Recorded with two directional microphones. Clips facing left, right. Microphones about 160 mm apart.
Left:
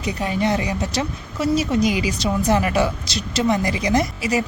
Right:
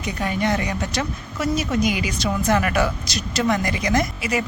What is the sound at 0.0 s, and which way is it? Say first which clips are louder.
A woman's voice: left 2 dB; 30° left (ahead or behind).